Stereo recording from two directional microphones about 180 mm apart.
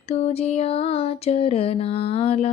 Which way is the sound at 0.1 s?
35° left (ahead or behind).